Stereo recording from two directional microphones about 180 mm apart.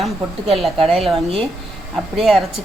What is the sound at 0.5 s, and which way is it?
Speech, centre (ahead or behind).